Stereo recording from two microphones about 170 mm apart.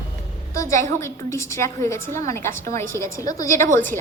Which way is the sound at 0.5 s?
20° left (ahead or behind).